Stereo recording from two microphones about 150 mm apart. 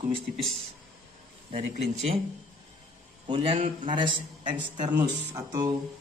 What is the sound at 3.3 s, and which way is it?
A man's voice, 35° right (ahead or behind).